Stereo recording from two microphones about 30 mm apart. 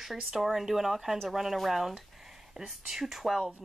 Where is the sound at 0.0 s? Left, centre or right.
Centre.